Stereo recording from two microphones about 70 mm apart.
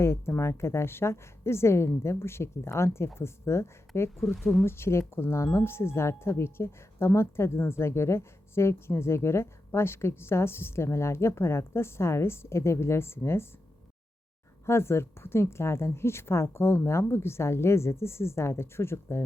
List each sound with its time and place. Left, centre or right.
0.0 s speech: left
4.4 s speech: centre
4.6 s speech: left
14.7 s speech: left